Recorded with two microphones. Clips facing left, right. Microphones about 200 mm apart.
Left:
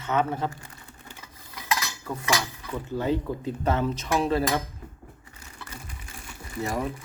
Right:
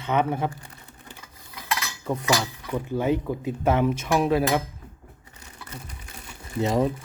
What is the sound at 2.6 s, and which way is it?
Speech, 15° right (ahead or behind).